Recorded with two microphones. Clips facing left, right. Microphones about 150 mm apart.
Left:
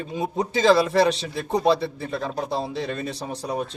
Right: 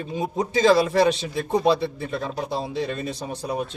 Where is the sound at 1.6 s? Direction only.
30° left (ahead or behind).